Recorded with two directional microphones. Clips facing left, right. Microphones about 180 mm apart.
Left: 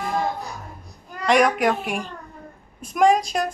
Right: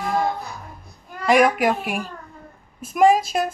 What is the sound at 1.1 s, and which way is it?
A woman's voice, 5° right (ahead or behind).